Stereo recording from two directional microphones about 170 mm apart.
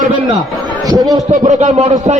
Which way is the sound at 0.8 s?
20° right (ahead or behind).